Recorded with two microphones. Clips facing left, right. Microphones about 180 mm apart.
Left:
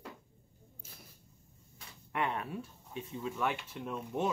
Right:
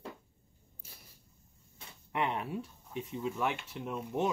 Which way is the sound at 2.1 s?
20° right (ahead or behind).